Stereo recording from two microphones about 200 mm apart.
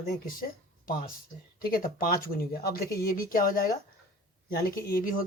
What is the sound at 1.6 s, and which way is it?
Speech, 45° left (ahead or behind).